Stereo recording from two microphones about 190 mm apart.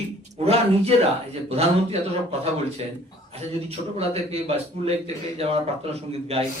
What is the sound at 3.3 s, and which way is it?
A man's voice, 30° right (ahead or behind).